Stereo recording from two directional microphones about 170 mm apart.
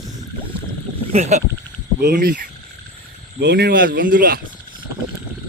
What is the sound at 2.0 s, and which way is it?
Speech, 60° right (ahead or behind).